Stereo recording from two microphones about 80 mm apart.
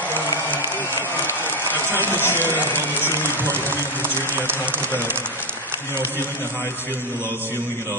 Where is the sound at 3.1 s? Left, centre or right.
Right.